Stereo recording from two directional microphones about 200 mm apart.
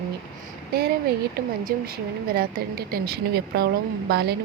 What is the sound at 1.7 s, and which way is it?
A woman's voice, 45° right (ahead or behind).